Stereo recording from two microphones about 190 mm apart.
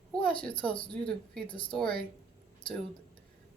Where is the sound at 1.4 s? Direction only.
25° left (ahead or behind).